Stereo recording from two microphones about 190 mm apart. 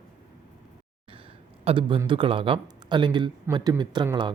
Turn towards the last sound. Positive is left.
turn(degrees=-25)  # may be behind; listen again after turning